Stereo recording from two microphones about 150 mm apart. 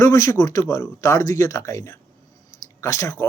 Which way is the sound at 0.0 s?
20° left (ahead or behind).